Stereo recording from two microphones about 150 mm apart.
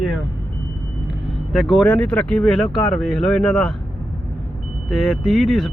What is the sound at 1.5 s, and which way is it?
Speech, centre (ahead or behind).